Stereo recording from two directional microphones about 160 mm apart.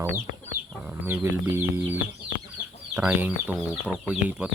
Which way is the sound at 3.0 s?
10° right (ahead or behind).